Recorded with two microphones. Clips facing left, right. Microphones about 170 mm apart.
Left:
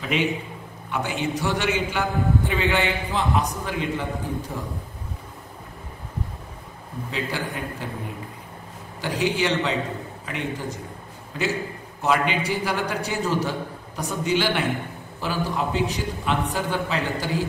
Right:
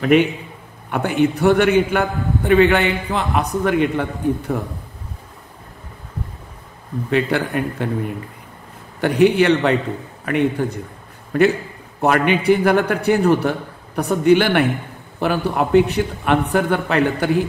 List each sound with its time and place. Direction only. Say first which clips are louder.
0.0 s a man's voice: right 9 dB; 55° right (ahead or behind)
7.1 s a man's voice: right 10 dB; 65° right (ahead or behind)
9.0 s a man's voice: right 10 dB; 60° right (ahead or behind)